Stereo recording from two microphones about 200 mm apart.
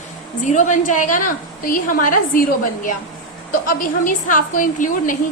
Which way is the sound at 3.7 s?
40° left (ahead or behind).